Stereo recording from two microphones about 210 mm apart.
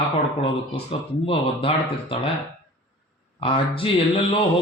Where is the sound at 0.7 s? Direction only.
25° left (ahead or behind).